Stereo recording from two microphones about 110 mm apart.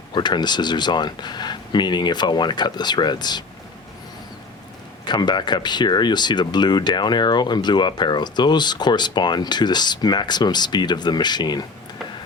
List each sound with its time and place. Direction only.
0.1 s speech: 40° left (ahead or behind)
5.0 s speech: 40° left (ahead or behind)